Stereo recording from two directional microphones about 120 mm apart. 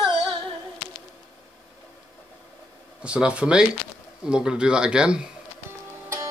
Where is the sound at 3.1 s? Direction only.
10° right (ahead or behind).